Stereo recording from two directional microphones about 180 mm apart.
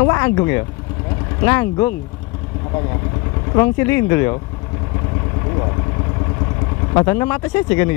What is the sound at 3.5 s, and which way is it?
Speech, 15° left (ahead or behind).